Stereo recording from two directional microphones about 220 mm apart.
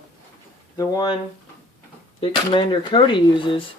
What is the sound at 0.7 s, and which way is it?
Speech, 15° left (ahead or behind).